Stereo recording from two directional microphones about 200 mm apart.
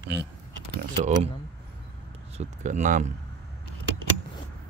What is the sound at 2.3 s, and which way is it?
Speech, 35° right (ahead or behind).